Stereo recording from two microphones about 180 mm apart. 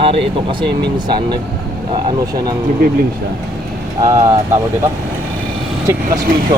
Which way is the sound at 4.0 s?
20° right (ahead or behind).